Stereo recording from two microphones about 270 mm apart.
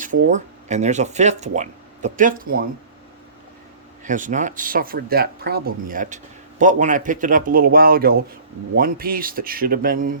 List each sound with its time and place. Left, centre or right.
0.0 s speech: right
4.0 s a man's voice: right